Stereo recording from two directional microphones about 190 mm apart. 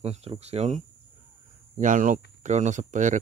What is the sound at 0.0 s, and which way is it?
Speech, 30° right (ahead or behind).